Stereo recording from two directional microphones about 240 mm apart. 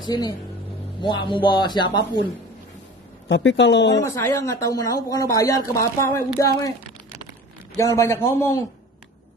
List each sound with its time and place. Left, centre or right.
0.0 s speech: centre
3.3 s speech: left
4.0 s speech: centre
7.7 s speech: centre